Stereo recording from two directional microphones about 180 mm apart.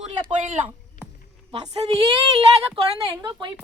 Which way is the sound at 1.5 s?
35° right (ahead or behind).